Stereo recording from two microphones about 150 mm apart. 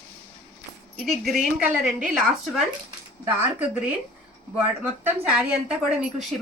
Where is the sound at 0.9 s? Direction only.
Centre (ahead or behind).